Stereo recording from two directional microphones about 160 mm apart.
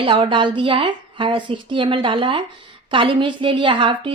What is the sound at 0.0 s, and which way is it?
A woman's voice, 35° right (ahead or behind).